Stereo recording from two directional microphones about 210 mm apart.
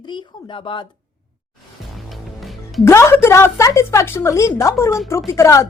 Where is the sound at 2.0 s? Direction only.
Centre (ahead or behind).